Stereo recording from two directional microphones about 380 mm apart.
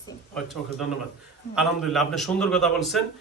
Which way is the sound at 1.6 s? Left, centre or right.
Centre.